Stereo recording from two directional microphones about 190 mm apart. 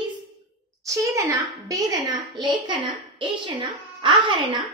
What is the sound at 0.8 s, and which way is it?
A woman's voice, 15° right (ahead or behind).